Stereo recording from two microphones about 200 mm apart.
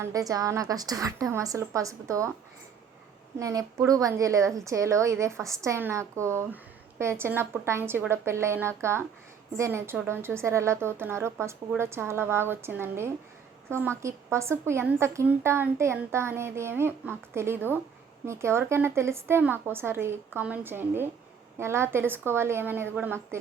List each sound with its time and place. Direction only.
0.0 s a woman's voice: 15° right (ahead or behind)
3.3 s a woman's voice: 15° right (ahead or behind)